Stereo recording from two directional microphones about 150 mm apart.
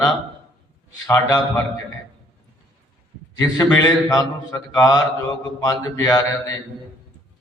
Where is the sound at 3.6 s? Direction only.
25° left (ahead or behind).